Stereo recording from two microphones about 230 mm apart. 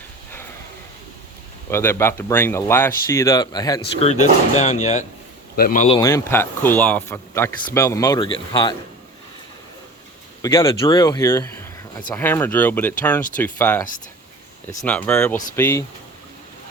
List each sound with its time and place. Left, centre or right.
1.7 s speech: centre; by 6.0 s left
6.0 s speech: centre
10.4 s speech: centre
14.8 s speech: centre